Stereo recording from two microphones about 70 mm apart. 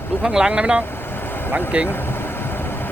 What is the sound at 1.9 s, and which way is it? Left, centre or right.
Vehicle, left.